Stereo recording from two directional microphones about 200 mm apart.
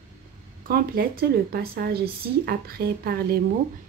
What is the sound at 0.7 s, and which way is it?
Speech, 50° right (ahead or behind).